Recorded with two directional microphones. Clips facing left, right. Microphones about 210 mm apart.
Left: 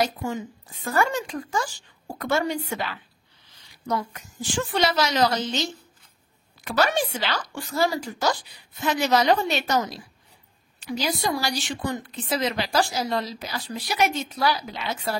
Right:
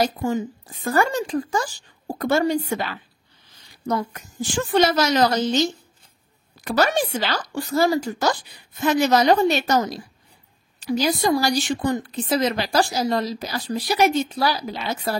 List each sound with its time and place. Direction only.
0.0 s a woman's voice: 35° right (ahead or behind)
6.6 s a woman's voice: 40° right (ahead or behind)